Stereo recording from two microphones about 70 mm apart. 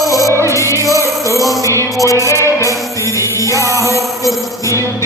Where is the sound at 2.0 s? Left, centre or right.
Left.